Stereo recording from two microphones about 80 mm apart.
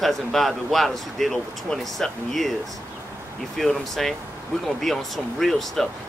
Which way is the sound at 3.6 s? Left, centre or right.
Centre.